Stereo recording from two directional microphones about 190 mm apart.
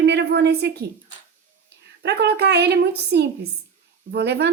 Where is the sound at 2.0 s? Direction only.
60° right (ahead or behind).